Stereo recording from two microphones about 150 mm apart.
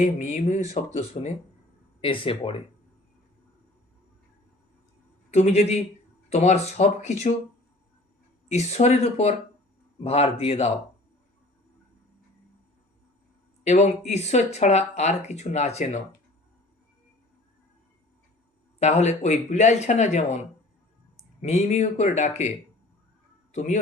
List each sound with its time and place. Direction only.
0.0 s speech: 55° left (ahead or behind); by 2.6 s 35° left (ahead or behind)
5.3 s speech: 45° left (ahead or behind)
8.4 s speech: 50° left (ahead or behind)
14.1 s speech: 45° left (ahead or behind)
18.8 s speech: 50° left (ahead or behind)
21.4 s speech: 45° left (ahead or behind)